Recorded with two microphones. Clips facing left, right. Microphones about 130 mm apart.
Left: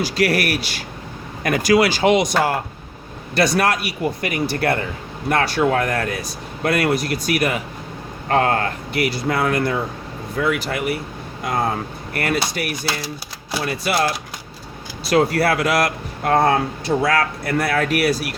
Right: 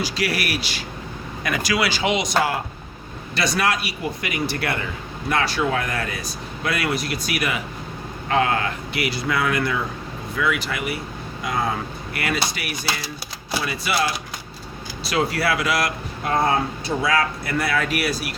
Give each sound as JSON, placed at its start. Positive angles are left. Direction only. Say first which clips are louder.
{"t": 0.0, "sound": "speech", "louder": "left 6 dB", "side_deg": 55}
{"t": 5.3, "sound": "speech", "louder": "left 4 dB", "side_deg": 55}
{"t": 15.1, "sound": "speech", "louder": "left 5 dB", "side_deg": 50}